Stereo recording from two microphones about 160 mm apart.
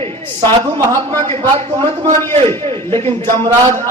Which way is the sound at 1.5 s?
35° right (ahead or behind).